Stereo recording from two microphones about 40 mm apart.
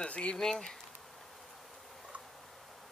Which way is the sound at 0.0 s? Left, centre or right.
Left.